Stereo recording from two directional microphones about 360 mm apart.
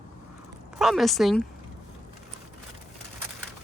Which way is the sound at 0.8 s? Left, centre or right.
Centre.